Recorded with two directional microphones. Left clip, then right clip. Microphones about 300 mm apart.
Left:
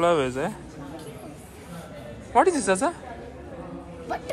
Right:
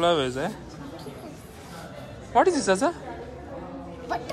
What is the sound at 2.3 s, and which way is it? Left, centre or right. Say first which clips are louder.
Speech: even; centre.